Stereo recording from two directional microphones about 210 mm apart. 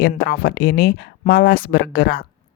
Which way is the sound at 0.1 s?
45° left (ahead or behind).